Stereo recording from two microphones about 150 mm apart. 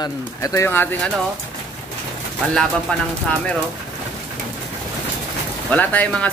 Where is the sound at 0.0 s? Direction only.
20° left (ahead or behind).